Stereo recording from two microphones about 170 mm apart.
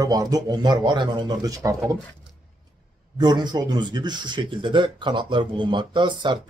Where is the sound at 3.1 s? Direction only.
25° right (ahead or behind).